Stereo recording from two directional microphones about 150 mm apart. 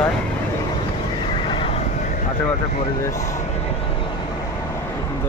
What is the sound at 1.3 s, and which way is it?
Neigh, 35° left (ahead or behind).